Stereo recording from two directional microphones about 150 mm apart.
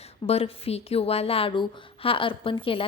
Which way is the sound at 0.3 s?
40° left (ahead or behind).